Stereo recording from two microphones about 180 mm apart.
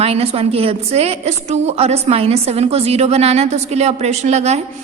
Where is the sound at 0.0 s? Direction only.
35° right (ahead or behind).